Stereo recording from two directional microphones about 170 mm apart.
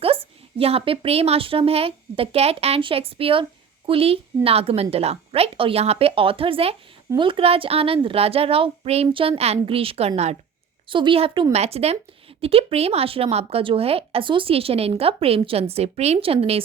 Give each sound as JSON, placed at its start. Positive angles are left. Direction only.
{"t": 0.6, "sound": "a woman's voice", "side_deg": -35}